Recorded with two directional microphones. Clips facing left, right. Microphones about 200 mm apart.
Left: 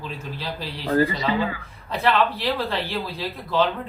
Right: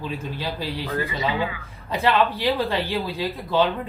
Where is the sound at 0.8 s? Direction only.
35° left (ahead or behind).